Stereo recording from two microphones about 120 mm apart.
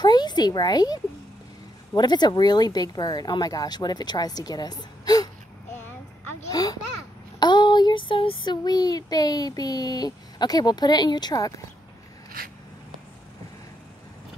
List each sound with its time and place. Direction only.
0.0 s speech: 35° left (ahead or behind)
2.0 s child singing: 35° left (ahead or behind)
6.5 s a sound: 30° left (ahead or behind)
7.3 s child singing: 40° left (ahead or behind)